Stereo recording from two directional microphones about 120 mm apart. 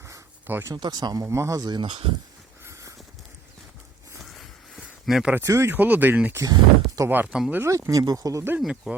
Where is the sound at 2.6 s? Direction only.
25° right (ahead or behind).